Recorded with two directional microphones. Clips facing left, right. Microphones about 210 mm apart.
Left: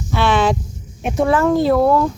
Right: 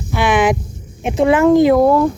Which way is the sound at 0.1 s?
15° right (ahead or behind).